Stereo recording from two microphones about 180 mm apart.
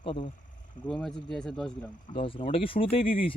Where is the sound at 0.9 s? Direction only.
Centre (ahead or behind).